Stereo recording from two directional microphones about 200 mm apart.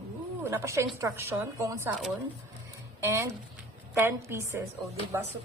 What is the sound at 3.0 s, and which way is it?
A woman's voice, 15° right (ahead or behind).